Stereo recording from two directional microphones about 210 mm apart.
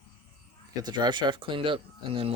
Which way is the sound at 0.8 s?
20° right (ahead or behind).